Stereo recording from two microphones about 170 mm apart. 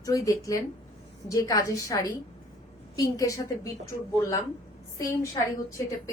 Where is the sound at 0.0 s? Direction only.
20° left (ahead or behind).